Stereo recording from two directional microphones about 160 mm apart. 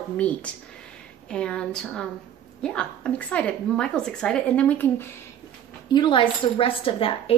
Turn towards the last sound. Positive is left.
turn(degrees=35)  # may be behind; listen again after turning